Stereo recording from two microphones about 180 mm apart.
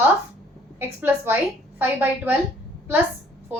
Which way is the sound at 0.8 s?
10° right (ahead or behind).